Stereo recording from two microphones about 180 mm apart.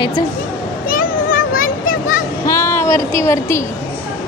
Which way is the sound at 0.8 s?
50° left (ahead or behind).